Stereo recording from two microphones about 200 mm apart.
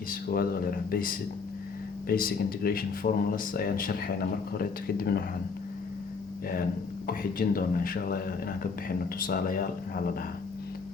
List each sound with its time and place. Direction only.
0.1 s speech: 45° left (ahead or behind)
7.1 s speech: 45° left (ahead or behind)